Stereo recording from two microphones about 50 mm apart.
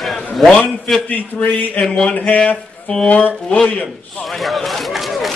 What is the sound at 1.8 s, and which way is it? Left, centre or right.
Speech, centre.